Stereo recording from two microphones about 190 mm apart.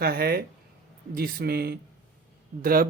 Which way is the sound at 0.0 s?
55° right (ahead or behind).